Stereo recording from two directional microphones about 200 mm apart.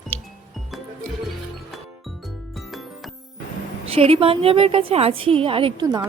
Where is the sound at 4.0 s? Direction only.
30° right (ahead or behind).